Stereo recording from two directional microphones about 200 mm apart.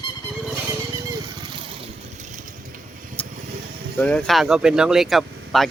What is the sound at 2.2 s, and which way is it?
Vehicle, 40° right (ahead or behind).